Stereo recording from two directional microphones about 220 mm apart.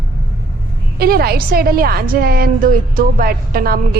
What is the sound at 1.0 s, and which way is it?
A woman's voice, 45° right (ahead or behind).